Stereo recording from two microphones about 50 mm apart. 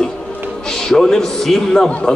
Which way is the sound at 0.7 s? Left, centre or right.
Centre.